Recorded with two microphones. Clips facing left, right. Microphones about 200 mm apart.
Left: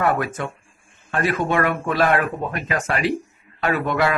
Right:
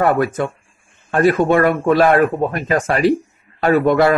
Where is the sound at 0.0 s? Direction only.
40° right (ahead or behind).